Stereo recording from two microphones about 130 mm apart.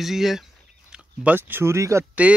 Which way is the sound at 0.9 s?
10° right (ahead or behind).